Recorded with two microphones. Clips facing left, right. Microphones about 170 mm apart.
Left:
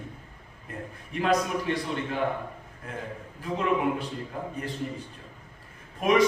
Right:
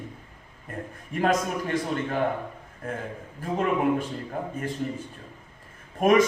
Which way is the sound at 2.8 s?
50° right (ahead or behind).